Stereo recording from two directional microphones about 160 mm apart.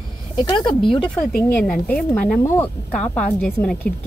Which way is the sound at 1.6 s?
5° left (ahead or behind).